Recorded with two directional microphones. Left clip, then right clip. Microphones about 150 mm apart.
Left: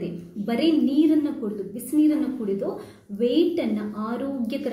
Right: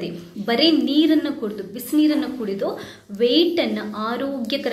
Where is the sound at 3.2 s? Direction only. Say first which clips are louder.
Right 4 dB; 15° left (ahead or behind).